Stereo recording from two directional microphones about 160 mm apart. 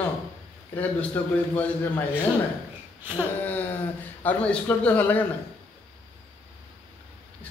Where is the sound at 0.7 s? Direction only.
10° left (ahead or behind).